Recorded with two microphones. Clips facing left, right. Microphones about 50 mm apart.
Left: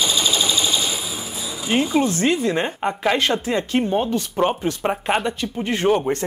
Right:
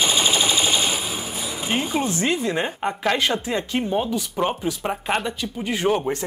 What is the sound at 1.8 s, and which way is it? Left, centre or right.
Speech, right.